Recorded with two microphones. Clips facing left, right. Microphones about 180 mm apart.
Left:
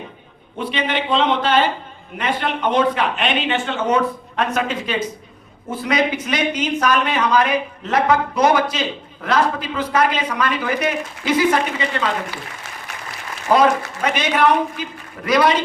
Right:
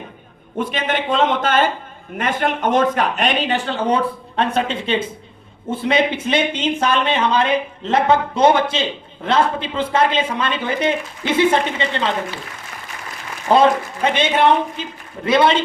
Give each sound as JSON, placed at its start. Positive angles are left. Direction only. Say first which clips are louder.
{"t": 0.6, "sound": "a man's voice", "louder": "right 1 dB", "side_deg": -45}
{"t": 13.5, "sound": "speech", "louder": "right 1 dB", "side_deg": -25}